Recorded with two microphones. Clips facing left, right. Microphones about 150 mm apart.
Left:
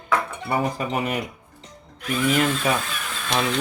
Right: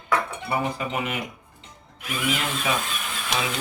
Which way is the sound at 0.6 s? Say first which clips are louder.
Left 3 dB; 40° left (ahead or behind).